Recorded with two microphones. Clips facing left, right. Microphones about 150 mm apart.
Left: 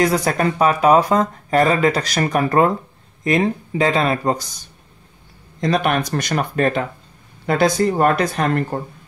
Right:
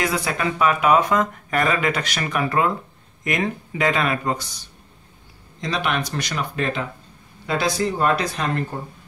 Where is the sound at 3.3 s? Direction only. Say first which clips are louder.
Left 6 dB; 30° left (ahead or behind).